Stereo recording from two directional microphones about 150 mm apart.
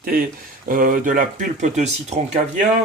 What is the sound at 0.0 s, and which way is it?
Speech, 75° right (ahead or behind).